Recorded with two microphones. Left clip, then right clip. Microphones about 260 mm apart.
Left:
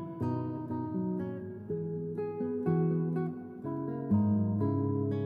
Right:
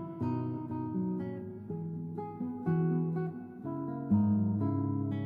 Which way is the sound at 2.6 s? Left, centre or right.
Left.